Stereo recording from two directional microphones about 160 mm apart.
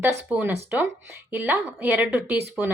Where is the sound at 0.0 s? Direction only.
10° right (ahead or behind).